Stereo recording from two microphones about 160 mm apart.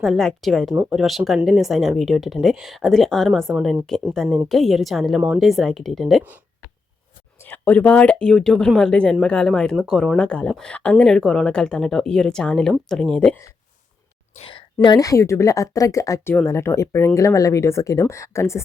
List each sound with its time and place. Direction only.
0.0 s speech: centre (ahead or behind)
7.3 s speech: 10° left (ahead or behind)
14.3 s a woman's voice: 35° left (ahead or behind); by 18.6 s 15° left (ahead or behind)